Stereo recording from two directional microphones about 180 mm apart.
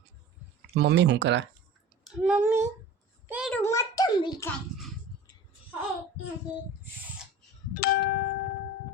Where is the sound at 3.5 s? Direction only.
15° left (ahead or behind).